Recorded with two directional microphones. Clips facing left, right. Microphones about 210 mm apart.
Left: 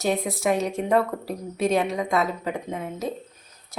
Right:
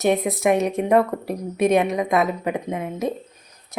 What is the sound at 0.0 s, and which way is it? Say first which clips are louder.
A woman's voice: right 5 dB; 20° right (ahead or behind).